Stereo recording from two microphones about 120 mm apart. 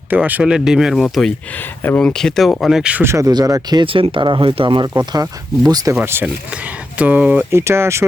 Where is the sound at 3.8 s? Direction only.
50° right (ahead or behind).